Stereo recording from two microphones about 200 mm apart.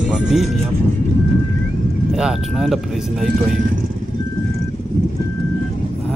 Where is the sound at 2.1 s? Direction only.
Centre (ahead or behind).